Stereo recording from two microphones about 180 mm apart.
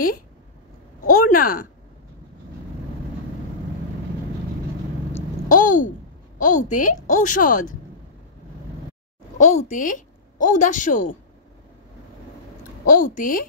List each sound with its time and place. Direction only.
1.0 s speech: 50° left (ahead or behind)
5.5 s a sound: 45° left (ahead or behind)
6.3 s a woman's voice: 45° left (ahead or behind)
9.4 s a woman's voice: 40° left (ahead or behind)
12.8 s a woman's voice: 50° left (ahead or behind)